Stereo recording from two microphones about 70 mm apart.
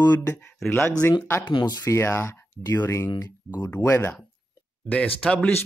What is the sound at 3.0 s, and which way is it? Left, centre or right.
Speech, left.